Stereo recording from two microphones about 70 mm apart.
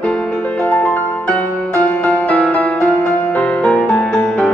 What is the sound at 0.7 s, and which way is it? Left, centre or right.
Music, left.